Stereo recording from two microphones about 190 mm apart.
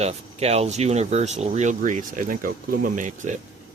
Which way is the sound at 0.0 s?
35° right (ahead or behind).